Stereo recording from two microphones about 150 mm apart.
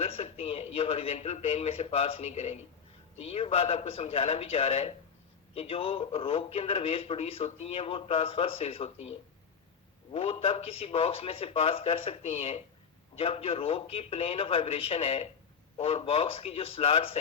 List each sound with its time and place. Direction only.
0.0 s a man's voice: 40° left (ahead or behind)